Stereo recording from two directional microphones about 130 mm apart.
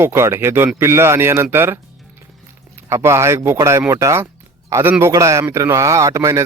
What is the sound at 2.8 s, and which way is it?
A man's voice, 20° right (ahead or behind).